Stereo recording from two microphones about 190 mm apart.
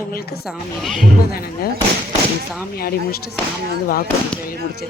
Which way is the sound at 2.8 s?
55° left (ahead or behind).